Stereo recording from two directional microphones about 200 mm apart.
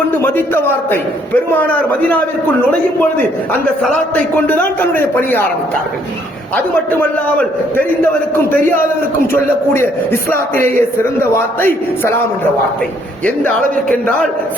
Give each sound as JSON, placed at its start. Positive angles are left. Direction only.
{"t": 0.2, "sound": "a man's voice", "side_deg": 10}
{"t": 4.1, "sound": "a man's voice", "side_deg": 10}
{"t": 6.9, "sound": "a man's voice", "side_deg": 10}
{"t": 9.2, "sound": "a man's voice", "side_deg": 10}
{"t": 13.2, "sound": "a man's voice", "side_deg": 10}